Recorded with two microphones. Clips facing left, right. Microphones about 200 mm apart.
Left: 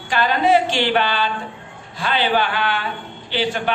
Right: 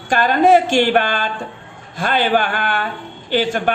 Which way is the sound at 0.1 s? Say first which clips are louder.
Right 4 dB; 50° right (ahead or behind).